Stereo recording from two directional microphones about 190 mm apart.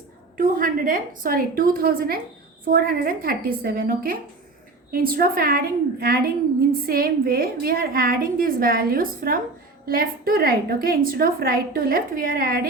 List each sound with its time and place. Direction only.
0.3 s a woman's voice: 45° right (ahead or behind)